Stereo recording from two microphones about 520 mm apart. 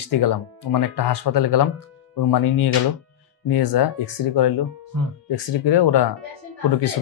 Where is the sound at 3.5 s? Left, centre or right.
Left.